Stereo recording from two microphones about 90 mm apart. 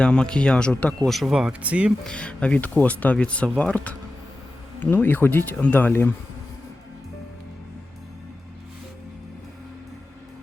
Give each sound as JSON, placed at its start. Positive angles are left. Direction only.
{"t": 0.0, "sound": "speech", "side_deg": 10}
{"t": 2.0, "sound": "speech", "side_deg": 10}